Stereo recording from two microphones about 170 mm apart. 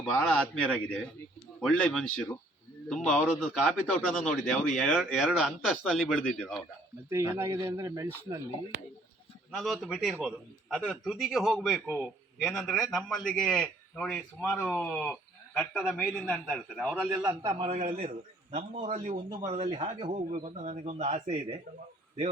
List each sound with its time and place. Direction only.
0.1 s a man's voice: 5° left (ahead or behind)
7.1 s speech: 15° right (ahead or behind)
9.5 s a man's voice: centre (ahead or behind)
17.4 s speech: 30° right (ahead or behind)
17.7 s a man's voice: 45° right (ahead or behind)
19.3 s speech: 25° right (ahead or behind)
20.3 s speech: 50° right (ahead or behind); by 21.6 s 30° right (ahead or behind)